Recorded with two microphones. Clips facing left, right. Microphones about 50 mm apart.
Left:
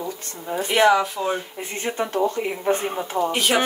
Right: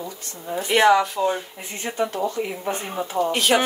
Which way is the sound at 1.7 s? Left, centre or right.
Left.